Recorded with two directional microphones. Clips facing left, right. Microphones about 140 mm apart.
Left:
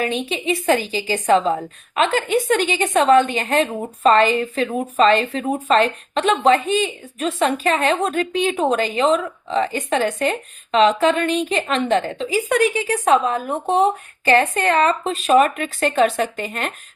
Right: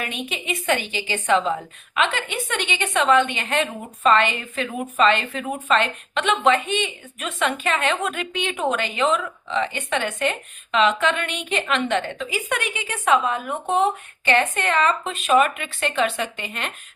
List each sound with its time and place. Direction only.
0.0 s a woman's voice: 30° left (ahead or behind)